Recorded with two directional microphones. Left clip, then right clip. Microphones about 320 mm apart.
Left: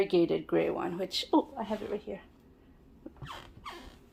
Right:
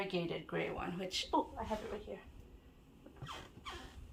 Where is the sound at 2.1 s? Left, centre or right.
Left.